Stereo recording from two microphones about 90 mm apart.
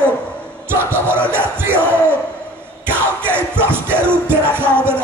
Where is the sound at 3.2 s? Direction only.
25° right (ahead or behind).